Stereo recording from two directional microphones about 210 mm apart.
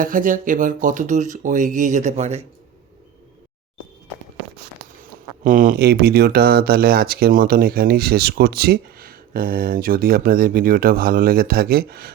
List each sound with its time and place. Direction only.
0.0 s speech: 40° right (ahead or behind)
5.4 s speech: 40° right (ahead or behind)